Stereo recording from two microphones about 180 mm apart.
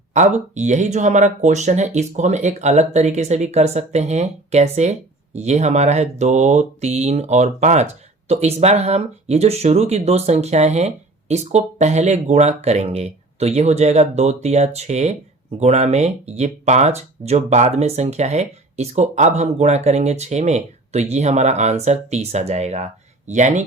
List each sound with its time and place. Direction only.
0.1 s speech: 40° right (ahead or behind)